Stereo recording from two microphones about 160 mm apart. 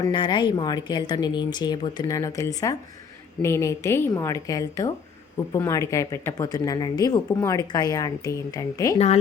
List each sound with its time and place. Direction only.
0.0 s speech: 30° left (ahead or behind)